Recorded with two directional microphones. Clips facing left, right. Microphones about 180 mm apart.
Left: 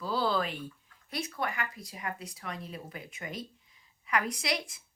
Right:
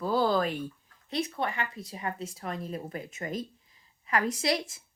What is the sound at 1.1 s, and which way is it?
Speech, 25° right (ahead or behind).